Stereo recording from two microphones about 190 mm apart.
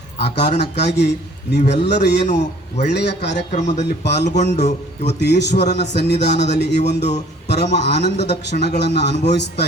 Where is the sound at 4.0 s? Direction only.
65° left (ahead or behind).